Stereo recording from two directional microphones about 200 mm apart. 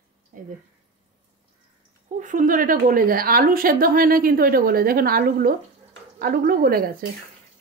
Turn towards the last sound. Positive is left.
turn(degrees=-45)  # may be behind; listen again after turning